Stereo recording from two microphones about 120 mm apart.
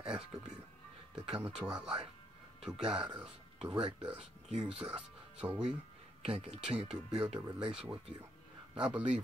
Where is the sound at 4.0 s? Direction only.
5° right (ahead or behind).